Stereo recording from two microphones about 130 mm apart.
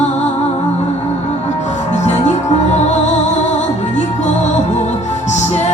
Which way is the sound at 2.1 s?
60° left (ahead or behind).